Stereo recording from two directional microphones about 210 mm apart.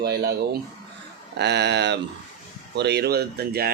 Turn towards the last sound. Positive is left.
turn(degrees=-45)  # may be behind; listen again after turning